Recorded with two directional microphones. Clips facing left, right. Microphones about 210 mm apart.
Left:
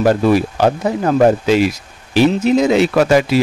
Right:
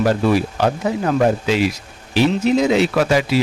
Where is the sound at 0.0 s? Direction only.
45° left (ahead or behind).